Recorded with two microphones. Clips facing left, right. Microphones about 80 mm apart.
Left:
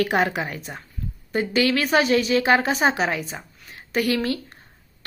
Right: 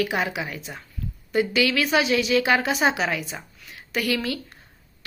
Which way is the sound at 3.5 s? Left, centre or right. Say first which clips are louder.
Left 4 dB; left.